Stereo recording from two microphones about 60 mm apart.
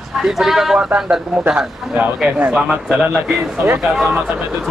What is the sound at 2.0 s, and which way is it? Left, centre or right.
Speech, right.